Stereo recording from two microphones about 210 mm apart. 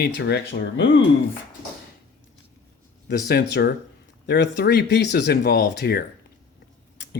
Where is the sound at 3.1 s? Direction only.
50° left (ahead or behind).